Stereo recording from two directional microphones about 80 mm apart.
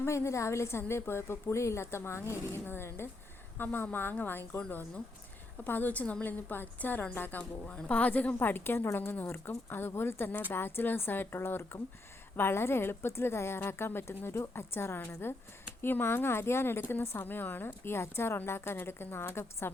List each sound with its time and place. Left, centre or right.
0.0 s a woman's voice: left